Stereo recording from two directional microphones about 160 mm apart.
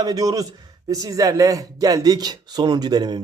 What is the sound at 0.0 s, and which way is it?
Speech, 25° right (ahead or behind).